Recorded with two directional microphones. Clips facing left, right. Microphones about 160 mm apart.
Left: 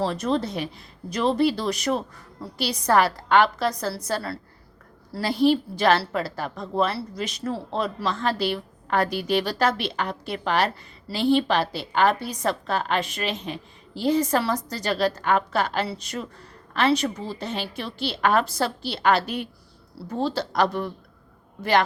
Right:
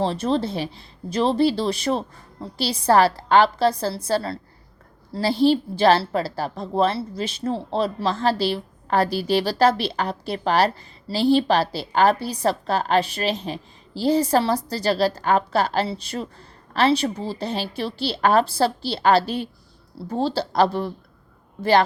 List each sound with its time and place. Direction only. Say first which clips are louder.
0.0 s a woman's voice: right 2 dB; 30° right (ahead or behind)